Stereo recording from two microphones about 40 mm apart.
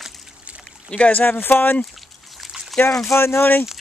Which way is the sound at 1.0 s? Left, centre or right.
Left.